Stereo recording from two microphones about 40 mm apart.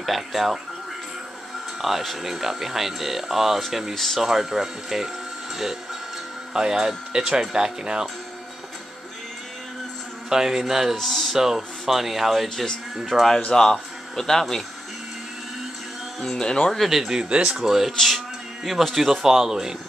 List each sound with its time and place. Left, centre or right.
0.0 s speech: centre
1.8 s speech: centre
3.9 s speech: centre
4.2 s speech: centre
6.5 s speech: centre
10.3 s speech: centre
11.0 s speech: centre
11.3 s speech: centre
13.5 s speech: centre
16.2 s speech: centre
17.1 s speech: centre
17.6 s speech: centre